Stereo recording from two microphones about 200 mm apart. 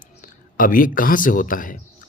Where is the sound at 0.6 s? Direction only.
45° left (ahead or behind).